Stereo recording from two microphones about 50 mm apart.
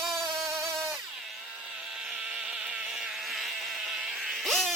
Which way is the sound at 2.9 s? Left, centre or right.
Centre.